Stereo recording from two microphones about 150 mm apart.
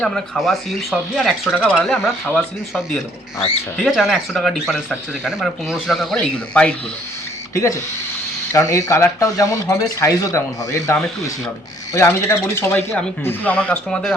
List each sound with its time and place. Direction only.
0.0 s speech: centre (ahead or behind)
3.8 s speech: centre (ahead or behind)
7.5 s speech: 20° left (ahead or behind)
11.9 s speech: 15° left (ahead or behind)